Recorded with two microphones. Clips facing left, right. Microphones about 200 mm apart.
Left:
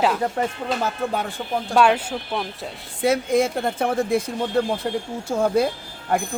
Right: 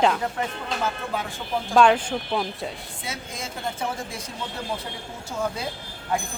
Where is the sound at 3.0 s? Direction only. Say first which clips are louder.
Left 17 dB; 60° left (ahead or behind).